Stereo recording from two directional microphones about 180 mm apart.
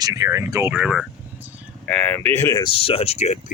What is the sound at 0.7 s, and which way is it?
Vehicle, 5° right (ahead or behind).